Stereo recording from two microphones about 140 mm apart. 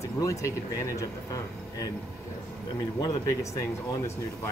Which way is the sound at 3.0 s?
25° left (ahead or behind).